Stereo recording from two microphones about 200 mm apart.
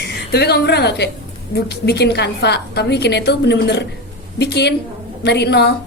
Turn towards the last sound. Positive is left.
turn(degrees=55)  # may be behind; listen again after turning